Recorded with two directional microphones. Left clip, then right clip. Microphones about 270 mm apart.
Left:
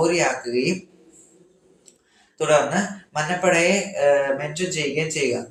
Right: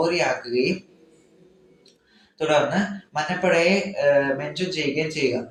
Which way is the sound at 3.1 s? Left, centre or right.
Left.